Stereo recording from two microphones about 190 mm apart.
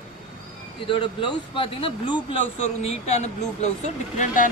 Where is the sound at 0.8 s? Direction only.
25° left (ahead or behind).